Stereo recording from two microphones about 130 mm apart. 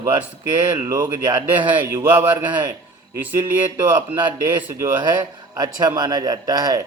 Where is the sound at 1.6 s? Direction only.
15° right (ahead or behind).